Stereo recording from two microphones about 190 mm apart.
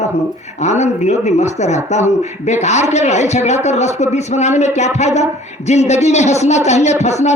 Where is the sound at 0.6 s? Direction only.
35° left (ahead or behind).